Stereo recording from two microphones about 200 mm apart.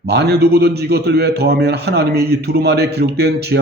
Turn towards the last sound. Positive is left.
turn(degrees=-55)  # may be behind; listen again after turning